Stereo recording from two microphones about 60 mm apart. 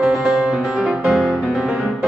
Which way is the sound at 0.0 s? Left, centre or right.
Centre.